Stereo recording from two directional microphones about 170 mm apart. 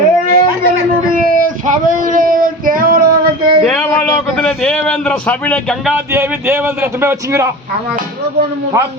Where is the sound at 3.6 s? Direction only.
5° left (ahead or behind).